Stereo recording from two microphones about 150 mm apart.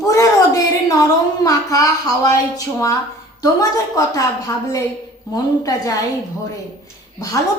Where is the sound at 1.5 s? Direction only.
20° left (ahead or behind).